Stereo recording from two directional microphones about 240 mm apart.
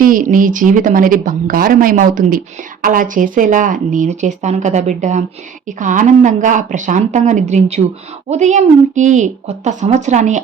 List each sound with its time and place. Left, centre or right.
0.0 s a woman's voice: right